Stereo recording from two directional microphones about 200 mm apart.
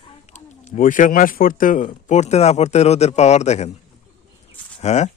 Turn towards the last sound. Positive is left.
turn(degrees=35)  # may be behind; listen again after turning